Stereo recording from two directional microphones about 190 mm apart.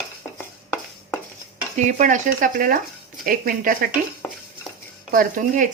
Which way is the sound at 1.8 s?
40° right (ahead or behind).